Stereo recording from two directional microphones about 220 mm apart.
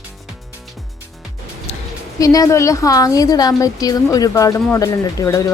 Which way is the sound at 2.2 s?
15° left (ahead or behind).